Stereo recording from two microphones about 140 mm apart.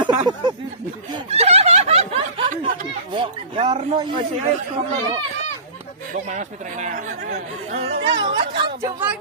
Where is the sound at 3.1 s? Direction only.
40° right (ahead or behind).